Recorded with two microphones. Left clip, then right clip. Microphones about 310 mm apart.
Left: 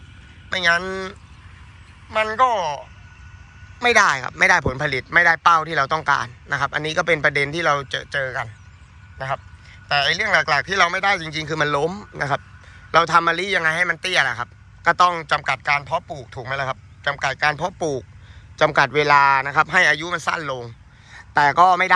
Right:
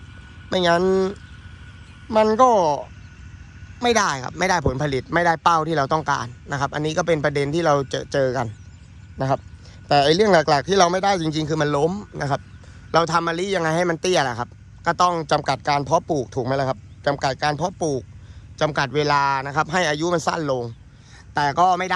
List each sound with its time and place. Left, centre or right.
0.5 s a man's voice: centre
9.9 s a man's voice: centre